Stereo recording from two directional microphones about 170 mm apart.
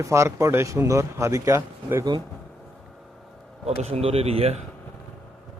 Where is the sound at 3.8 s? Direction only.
40° right (ahead or behind).